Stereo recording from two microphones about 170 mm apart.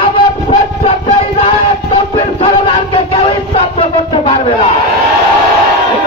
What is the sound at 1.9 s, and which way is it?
Music, 35° left (ahead or behind).